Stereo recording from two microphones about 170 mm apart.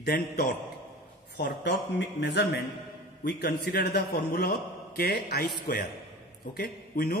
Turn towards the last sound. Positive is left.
turn(degrees=65)  # may be behind; listen again after turning